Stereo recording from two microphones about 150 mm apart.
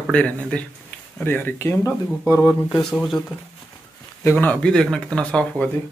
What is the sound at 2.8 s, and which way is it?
Speech, 5° left (ahead or behind).